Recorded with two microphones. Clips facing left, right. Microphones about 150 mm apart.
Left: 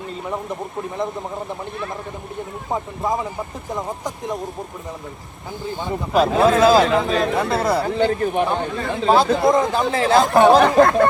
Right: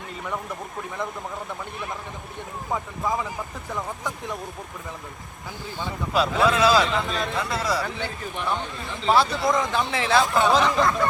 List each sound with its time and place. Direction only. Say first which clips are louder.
2.7 s speech: left 4 dB; 30° left (ahead or behind)
5.8 s a man's voice: left 6 dB; 45° left (ahead or behind)
7.3 s speech: left 7 dB; 55° left (ahead or behind)
9.0 s a man's voice: left 5 dB; 45° left (ahead or behind)